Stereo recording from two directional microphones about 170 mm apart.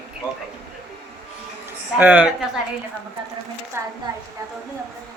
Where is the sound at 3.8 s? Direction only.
15° right (ahead or behind).